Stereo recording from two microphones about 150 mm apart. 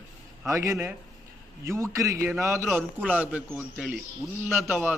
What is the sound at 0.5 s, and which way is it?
A man's voice, 20° right (ahead or behind).